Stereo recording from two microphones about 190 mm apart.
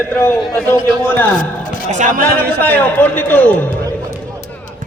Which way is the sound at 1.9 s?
40° right (ahead or behind).